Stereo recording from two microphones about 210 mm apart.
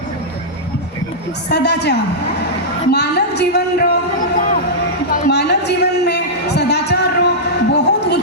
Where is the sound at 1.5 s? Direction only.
55° left (ahead or behind).